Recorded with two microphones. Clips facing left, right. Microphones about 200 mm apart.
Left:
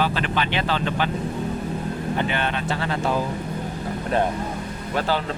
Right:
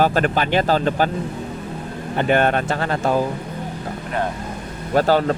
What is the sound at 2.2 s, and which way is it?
Speech, 50° right (ahead or behind).